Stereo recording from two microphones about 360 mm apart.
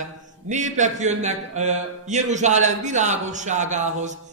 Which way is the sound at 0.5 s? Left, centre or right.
Centre.